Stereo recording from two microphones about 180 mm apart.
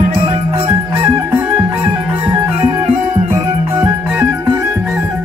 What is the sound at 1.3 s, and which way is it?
Music, 10° right (ahead or behind).